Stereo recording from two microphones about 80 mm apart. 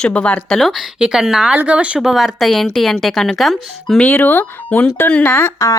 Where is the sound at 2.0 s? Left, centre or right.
Centre.